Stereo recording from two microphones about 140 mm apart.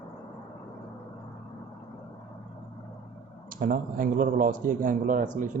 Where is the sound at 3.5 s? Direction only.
85° right; by 5.5 s 65° right (ahead or behind).